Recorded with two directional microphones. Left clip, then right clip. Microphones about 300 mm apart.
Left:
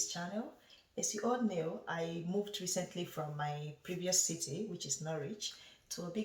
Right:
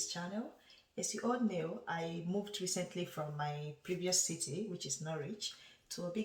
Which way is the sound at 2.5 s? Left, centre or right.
Centre.